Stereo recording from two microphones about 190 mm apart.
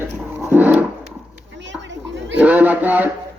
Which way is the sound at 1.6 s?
70° right (ahead or behind).